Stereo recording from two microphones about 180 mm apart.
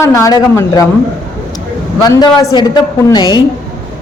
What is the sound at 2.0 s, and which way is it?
A man's voice, 20° left (ahead or behind).